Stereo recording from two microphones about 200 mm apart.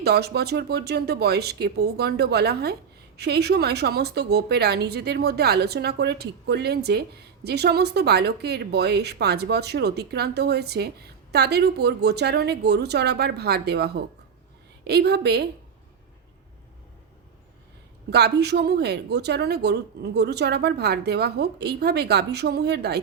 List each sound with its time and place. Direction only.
0.0 s speech: 55° right (ahead or behind)
18.1 s speech: 55° right (ahead or behind)